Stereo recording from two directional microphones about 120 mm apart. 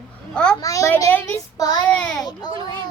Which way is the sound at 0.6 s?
25° left (ahead or behind).